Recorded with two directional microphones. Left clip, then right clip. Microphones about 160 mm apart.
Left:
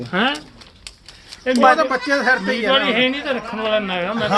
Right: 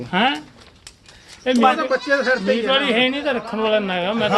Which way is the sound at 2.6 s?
60° right (ahead or behind).